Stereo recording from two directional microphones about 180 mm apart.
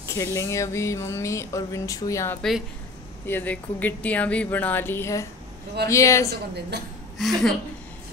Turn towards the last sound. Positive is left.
turn(degrees=0)  # may be behind; listen again after turning